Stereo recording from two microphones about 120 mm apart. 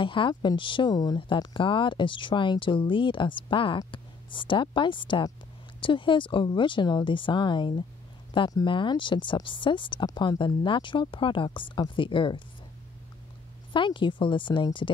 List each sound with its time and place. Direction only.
0.0 s speech: 45° left (ahead or behind)
13.7 s speech: 45° left (ahead or behind)